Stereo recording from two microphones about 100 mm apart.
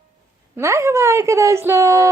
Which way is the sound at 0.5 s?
30° right (ahead or behind).